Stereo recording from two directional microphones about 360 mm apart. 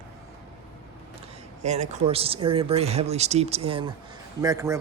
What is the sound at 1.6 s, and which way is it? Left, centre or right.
Speech, centre.